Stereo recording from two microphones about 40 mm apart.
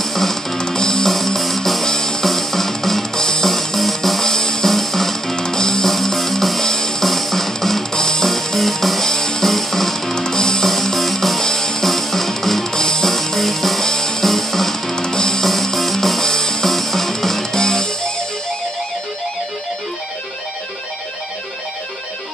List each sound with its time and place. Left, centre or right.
0.0 s music: centre
0.6 s music: centre
1.1 s music: centre
2.2 s drum: centre
3.4 s music: centre
5.9 s music: centre
8.3 s music: centre
10.1 s music: centre
10.7 s music: centre